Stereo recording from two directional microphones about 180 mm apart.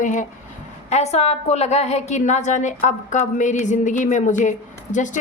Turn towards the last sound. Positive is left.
turn(degrees=45)  # may be behind; listen again after turning